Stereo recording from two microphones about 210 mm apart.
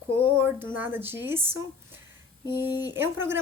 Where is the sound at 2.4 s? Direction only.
20° left (ahead or behind).